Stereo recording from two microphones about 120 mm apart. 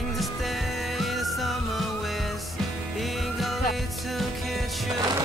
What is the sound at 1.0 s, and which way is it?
Music, centre (ahead or behind).